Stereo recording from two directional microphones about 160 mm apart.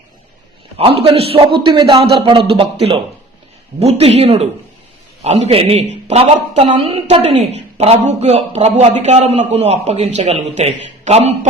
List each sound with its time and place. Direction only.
0.8 s a man's voice: 35° right (ahead or behind)